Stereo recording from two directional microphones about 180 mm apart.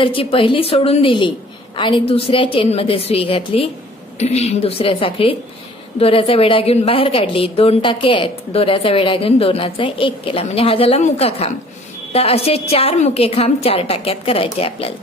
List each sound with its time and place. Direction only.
0.0 s a woman's voice: 30° left (ahead or behind)